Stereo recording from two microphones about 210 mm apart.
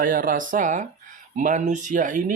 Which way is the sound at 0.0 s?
40° right (ahead or behind).